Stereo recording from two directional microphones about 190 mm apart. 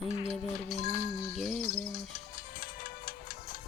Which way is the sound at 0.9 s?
50° left (ahead or behind).